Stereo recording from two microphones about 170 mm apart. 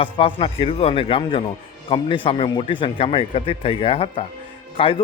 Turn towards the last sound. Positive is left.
turn(degrees=30)  # may be behind; listen again after turning